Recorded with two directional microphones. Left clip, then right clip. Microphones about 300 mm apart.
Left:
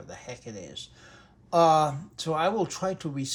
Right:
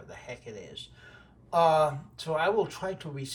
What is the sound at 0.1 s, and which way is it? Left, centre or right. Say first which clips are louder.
Speech: left 1 dB; left.